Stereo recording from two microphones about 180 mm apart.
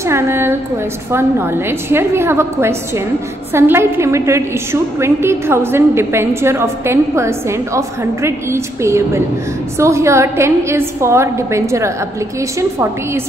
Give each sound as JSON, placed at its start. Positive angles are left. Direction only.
{"t": 0.0, "sound": "a woman's voice", "side_deg": -15}